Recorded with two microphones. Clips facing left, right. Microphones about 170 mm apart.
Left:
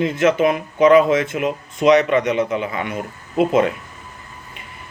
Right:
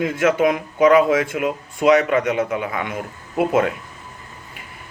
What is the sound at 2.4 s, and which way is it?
Speech, 60° right (ahead or behind).